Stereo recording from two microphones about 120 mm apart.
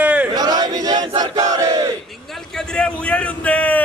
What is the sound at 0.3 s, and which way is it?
Battle cry, 35° right (ahead or behind).